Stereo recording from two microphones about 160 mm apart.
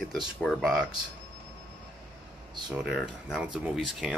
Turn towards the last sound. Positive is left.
turn(degrees=-5)  # may be behind; listen again after turning